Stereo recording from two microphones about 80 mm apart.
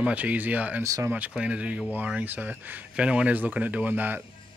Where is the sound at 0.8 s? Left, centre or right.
Right.